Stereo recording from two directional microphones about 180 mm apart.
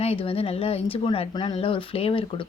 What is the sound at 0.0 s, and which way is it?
Speech, 35° left (ahead or behind).